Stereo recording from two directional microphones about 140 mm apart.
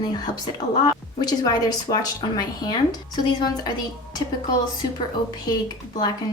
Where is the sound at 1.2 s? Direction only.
30° left (ahead or behind).